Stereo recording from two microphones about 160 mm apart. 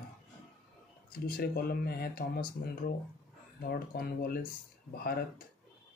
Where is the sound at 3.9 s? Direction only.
70° left (ahead or behind).